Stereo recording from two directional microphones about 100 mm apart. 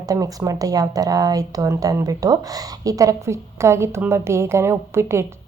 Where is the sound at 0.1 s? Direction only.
35° right (ahead or behind).